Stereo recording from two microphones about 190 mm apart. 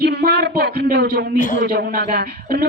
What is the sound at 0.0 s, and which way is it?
Speech, 60° right (ahead or behind).